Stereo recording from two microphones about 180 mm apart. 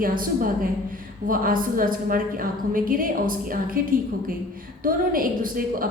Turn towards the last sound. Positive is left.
turn(degrees=-50)  # may be behind; listen again after turning